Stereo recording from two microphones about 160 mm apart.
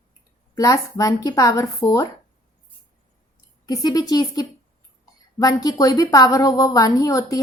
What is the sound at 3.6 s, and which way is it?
A woman's voice, 25° left (ahead or behind).